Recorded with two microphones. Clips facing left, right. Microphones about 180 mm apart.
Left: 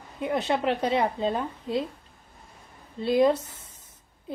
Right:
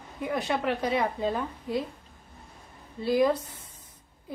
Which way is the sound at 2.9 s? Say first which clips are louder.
Left 2 dB; 25° left (ahead or behind).